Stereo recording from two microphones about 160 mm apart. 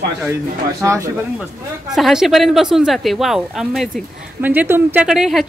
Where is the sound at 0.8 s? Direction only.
20° right (ahead or behind).